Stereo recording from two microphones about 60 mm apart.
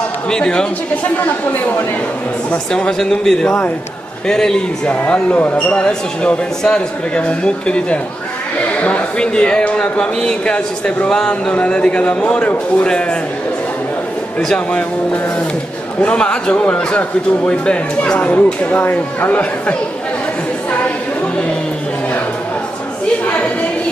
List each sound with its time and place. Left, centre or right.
0.3 s speech: centre
2.7 s a man's voice: centre
14.5 s a man's voice: left
16.0 s a man's voice: centre
18.2 s a man's voice: left